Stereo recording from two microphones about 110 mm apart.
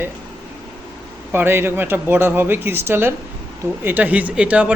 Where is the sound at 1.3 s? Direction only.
20° right (ahead or behind).